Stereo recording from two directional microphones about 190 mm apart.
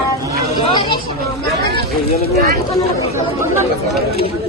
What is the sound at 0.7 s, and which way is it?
Speech, 25° left (ahead or behind).